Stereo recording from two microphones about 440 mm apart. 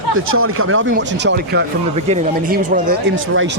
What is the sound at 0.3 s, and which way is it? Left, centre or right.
A man's voice, right.